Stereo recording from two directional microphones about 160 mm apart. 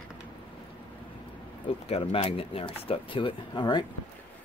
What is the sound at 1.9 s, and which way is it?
Speech, 35° left (ahead or behind).